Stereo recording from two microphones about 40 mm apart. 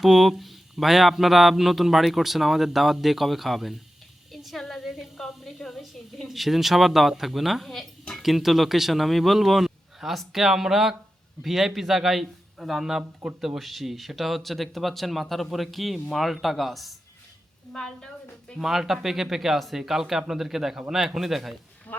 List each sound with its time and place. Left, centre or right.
0.0 s speech: centre
4.3 s a sound: centre
4.7 s speech: centre
17.7 s a woman's voice: centre
18.6 s speech: centre